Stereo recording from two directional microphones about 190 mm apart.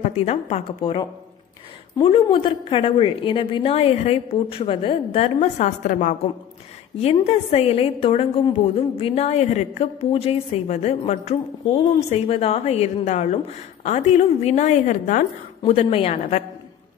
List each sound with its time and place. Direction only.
0.0 s a woman's voice: 35° left (ahead or behind)